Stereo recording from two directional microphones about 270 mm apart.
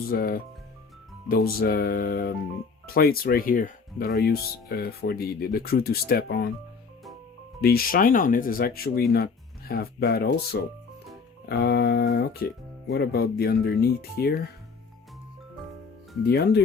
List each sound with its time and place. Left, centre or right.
0.1 s speech: left
7.6 s speech: left
16.2 s speech: left